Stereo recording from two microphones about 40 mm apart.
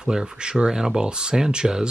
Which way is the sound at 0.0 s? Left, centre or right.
Centre.